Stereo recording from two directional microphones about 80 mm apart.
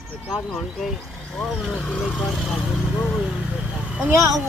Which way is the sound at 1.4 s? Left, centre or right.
Centre.